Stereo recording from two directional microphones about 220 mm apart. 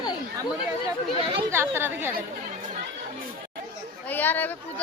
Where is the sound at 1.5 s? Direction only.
10° right (ahead or behind).